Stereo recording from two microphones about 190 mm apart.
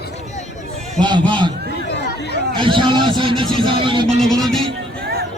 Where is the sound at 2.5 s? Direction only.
25° right (ahead or behind).